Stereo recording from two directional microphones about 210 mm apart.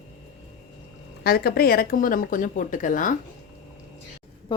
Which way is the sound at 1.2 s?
50° left (ahead or behind).